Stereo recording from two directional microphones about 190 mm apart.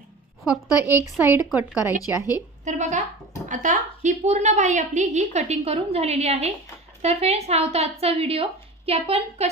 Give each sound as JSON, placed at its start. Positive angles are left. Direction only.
{"t": 0.4, "sound": "a woman's voice", "side_deg": -5}
{"t": 2.1, "sound": "speech", "side_deg": 20}
{"t": 2.6, "sound": "a woman's voice", "side_deg": -40}